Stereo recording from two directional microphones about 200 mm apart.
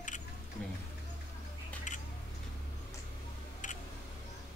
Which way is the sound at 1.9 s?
40° left (ahead or behind).